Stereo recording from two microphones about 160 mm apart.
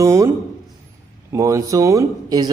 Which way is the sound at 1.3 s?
20° right (ahead or behind).